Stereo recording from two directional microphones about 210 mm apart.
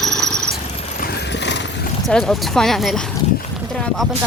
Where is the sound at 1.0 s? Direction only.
55° left (ahead or behind).